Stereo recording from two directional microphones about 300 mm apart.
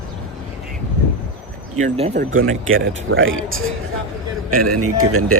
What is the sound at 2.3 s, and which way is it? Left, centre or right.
Speech, right.